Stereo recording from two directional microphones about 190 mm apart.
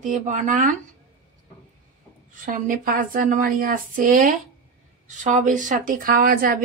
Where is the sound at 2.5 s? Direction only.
45° right (ahead or behind).